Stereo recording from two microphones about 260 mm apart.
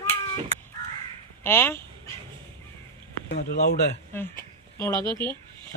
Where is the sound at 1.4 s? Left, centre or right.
Centre.